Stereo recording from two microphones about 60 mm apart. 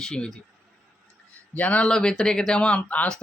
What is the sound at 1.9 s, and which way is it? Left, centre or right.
Speech, centre.